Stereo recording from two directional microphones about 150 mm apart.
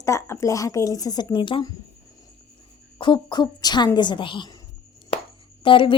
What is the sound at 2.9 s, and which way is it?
A woman's voice, 30° left (ahead or behind).